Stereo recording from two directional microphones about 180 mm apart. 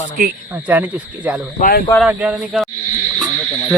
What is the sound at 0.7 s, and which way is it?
Speech, 10° right (ahead or behind).